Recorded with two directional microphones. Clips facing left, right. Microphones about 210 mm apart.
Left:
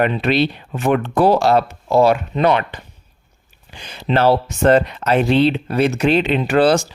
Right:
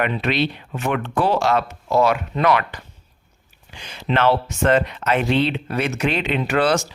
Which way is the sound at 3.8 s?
35° left (ahead or behind).